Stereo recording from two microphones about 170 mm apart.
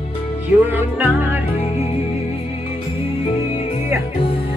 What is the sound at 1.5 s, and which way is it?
Music, 35° left (ahead or behind).